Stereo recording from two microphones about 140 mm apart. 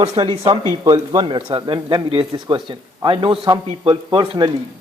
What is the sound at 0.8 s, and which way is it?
A man's voice, 25° right (ahead or behind).